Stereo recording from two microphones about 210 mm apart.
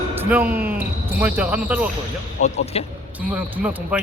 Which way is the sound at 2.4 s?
30° left (ahead or behind).